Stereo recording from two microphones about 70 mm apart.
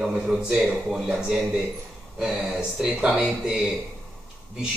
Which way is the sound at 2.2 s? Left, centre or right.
Centre.